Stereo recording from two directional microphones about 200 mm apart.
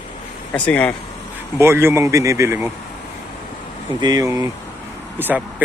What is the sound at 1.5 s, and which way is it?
A man's voice, 10° right (ahead or behind).